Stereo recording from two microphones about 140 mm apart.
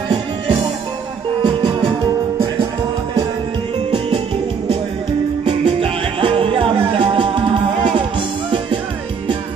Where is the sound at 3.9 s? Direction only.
40° right (ahead or behind).